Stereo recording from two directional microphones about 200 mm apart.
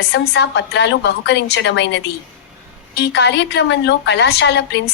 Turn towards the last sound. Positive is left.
turn(degrees=60)  # may be behind; listen again after turning